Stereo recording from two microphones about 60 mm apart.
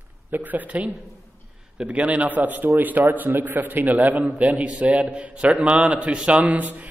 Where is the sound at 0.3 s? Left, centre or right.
Right.